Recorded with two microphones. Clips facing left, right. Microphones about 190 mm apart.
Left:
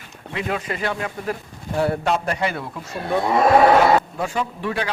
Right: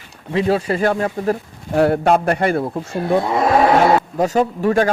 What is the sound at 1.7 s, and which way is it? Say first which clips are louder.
Speech: right 6 dB; 60° right (ahead or behind).